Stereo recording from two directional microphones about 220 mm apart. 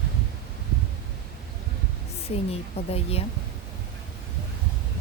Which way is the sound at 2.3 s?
25° left (ahead or behind).